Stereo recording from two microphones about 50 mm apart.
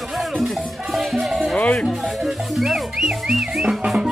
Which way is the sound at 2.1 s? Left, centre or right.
Centre.